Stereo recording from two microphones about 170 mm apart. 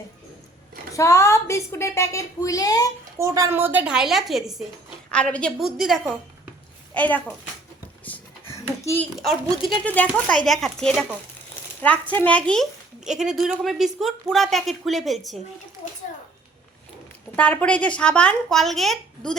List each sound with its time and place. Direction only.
0.9 s speech: 15° left (ahead or behind)
3.2 s a woman's voice: 20° right (ahead or behind); by 6.1 s centre (ahead or behind)
6.9 s speech: 10° left (ahead or behind)
8.0 s a sound: 10° left (ahead or behind)
9.1 s speech: centre (ahead or behind)
17.3 s speech: 10° left (ahead or behind)